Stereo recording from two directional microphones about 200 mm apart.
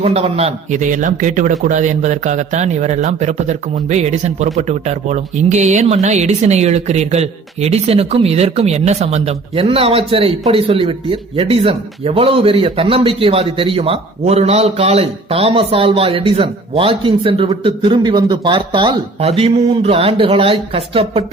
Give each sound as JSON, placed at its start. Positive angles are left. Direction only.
{"t": 0.0, "sound": "a man's voice", "side_deg": -30}